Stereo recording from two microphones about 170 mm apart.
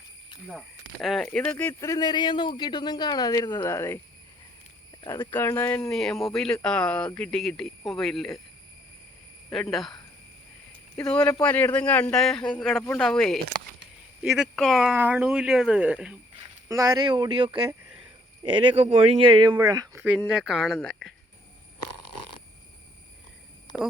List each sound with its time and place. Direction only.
1.0 s speech: centre (ahead or behind); by 5.3 s 25° left (ahead or behind)
5.3 s speech: 10° left (ahead or behind)
9.5 s speech: centre (ahead or behind)
10.9 s speech: 5° left (ahead or behind)
16.6 s speech: 20° right (ahead or behind)
18.8 s speech: 35° right (ahead or behind); by 20.1 s 15° right (ahead or behind)
20.1 s speech: centre (ahead or behind)